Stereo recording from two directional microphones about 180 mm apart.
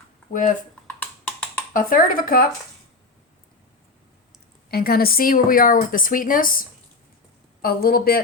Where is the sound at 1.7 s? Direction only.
50° left (ahead or behind).